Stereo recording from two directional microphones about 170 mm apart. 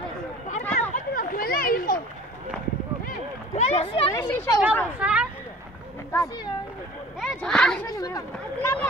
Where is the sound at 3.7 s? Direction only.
35° left (ahead or behind).